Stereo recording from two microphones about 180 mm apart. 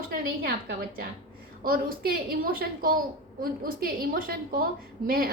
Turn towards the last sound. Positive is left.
turn(degrees=-55)  # may be behind; listen again after turning